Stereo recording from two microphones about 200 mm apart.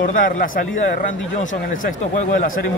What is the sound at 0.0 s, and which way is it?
Speech, 45° left (ahead or behind).